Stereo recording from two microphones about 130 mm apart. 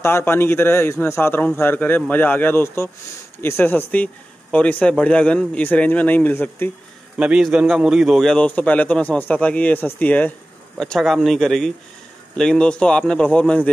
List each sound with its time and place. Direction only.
0.0 s speech: 20° left (ahead or behind)
7.2 s a man's voice: 10° right (ahead or behind); by 13.7 s 10° left (ahead or behind)